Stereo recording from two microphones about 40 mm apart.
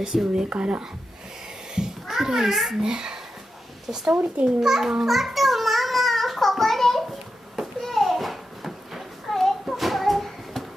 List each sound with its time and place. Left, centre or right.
0.0 s a child's voice: centre
0.5 s speech: right
1.8 s a child's voice: centre
2.8 s a child's voice: centre
5.1 s a sound: centre
7.8 s children playing: centre
9.3 s a sound: centre